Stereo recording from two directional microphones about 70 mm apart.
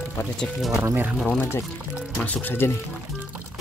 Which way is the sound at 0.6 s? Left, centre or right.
Centre.